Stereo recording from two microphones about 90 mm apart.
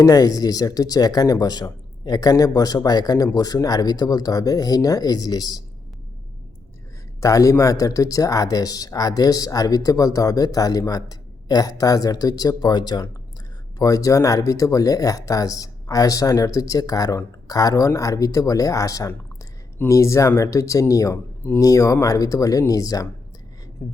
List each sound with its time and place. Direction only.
0.0 s speech: 40° left (ahead or behind)
7.2 s speech: 40° left (ahead or behind)